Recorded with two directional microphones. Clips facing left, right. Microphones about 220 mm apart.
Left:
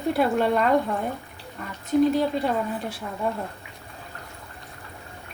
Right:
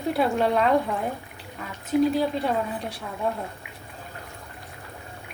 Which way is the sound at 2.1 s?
Centre (ahead or behind).